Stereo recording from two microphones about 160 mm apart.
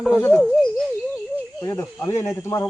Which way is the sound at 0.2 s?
10° left (ahead or behind).